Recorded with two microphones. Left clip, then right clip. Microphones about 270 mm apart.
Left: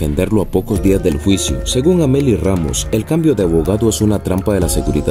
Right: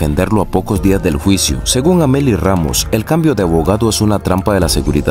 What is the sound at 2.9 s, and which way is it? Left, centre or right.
Speech, right.